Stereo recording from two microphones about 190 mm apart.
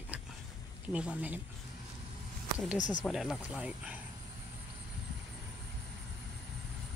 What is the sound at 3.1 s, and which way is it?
Speech, centre (ahead or behind).